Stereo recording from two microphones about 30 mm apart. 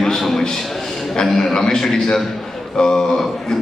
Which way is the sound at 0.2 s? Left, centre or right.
Centre.